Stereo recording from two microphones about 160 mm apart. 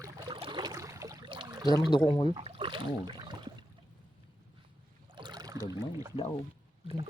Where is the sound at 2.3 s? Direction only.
35° right (ahead or behind).